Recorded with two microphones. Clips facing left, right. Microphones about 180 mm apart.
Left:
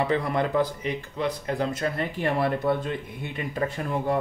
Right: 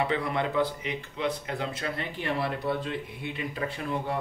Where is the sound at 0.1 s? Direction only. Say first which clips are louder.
Left 4 dB; 45° left (ahead or behind).